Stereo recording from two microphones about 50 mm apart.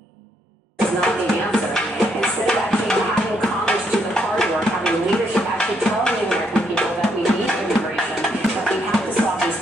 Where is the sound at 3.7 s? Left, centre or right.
Centre.